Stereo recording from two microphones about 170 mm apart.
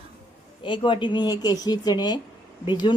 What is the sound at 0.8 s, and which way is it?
A woman's voice, 30° left (ahead or behind).